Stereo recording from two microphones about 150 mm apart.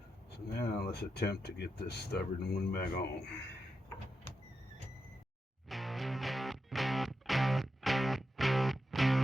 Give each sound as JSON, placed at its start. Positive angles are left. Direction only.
{"t": 0.3, "sound": "speech", "side_deg": 90}
{"t": 5.6, "sound": "music", "side_deg": 0}